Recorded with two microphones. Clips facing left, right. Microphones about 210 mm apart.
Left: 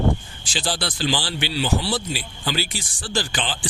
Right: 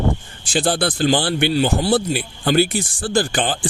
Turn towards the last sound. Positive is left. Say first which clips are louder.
# right 7 dB
turn(degrees=-50)  # may be behind; listen again after turning